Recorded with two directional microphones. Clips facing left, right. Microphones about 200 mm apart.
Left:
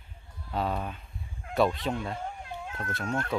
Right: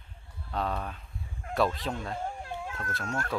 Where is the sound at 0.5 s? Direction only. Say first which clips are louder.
Left 2 dB; 5° left (ahead or behind).